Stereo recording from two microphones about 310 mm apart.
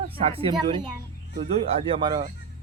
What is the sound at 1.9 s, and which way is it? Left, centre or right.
Speech, centre.